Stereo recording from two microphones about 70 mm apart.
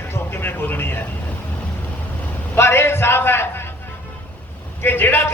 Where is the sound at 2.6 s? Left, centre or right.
Left.